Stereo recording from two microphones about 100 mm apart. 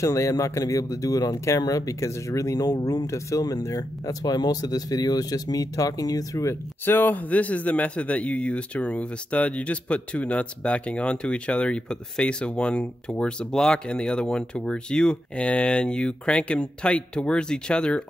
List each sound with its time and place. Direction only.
0.0 s speech: 30° left (ahead or behind)
6.9 s speech: 20° left (ahead or behind)